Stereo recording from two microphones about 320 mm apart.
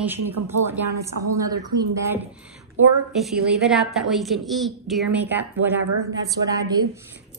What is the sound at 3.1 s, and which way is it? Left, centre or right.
A woman's voice, centre.